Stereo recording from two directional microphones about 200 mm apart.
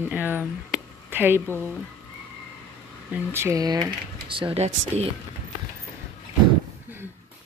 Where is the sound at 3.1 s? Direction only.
10° right (ahead or behind); by 5.1 s 35° right (ahead or behind).